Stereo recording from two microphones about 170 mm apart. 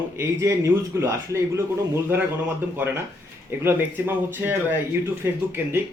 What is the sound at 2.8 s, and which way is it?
Speech, 10° right (ahead or behind).